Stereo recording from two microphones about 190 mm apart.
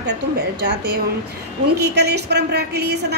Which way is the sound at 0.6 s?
60° right (ahead or behind).